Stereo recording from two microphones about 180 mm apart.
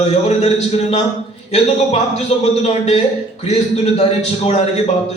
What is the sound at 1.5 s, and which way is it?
A man's voice, 35° left (ahead or behind).